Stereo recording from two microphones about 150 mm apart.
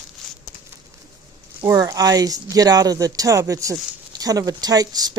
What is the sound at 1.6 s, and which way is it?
Speech, 20° right (ahead or behind).